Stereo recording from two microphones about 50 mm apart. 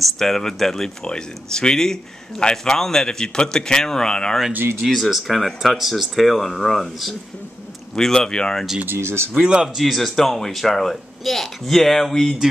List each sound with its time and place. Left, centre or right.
0.0 s speech: centre
4.8 s speech: centre
8.8 s speech: right
9.3 s speech: centre
9.8 s speech: centre